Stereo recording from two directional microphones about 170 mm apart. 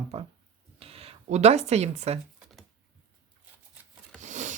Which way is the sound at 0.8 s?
35° right (ahead or behind).